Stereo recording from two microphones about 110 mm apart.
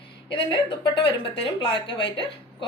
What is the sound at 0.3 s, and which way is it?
Speech, 45° left (ahead or behind).